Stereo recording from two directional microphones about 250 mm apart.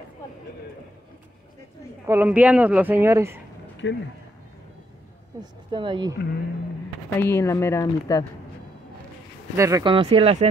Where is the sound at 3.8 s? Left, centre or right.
Left.